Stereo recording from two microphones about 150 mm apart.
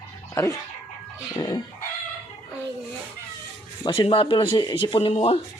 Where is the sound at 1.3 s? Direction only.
30° left (ahead or behind).